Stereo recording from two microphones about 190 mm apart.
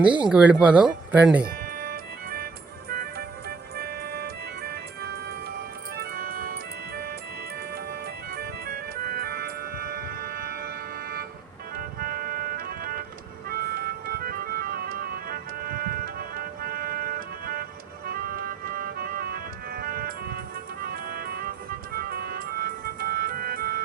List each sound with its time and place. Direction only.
0.0 s speech: 5° right (ahead or behind)
1.5 s music: 50° right (ahead or behind)
8.3 s music: 55° right (ahead or behind)
11.8 s organ: 50° right (ahead or behind)
13.5 s music: 50° right (ahead or behind)